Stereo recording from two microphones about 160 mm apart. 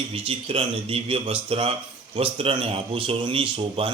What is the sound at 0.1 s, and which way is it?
Speech, 35° right (ahead or behind).